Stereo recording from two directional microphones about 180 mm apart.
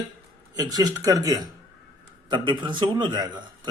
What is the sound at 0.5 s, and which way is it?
A man's voice, 20° right (ahead or behind).